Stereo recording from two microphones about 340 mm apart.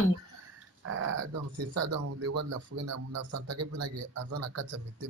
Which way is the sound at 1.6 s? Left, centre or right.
Right.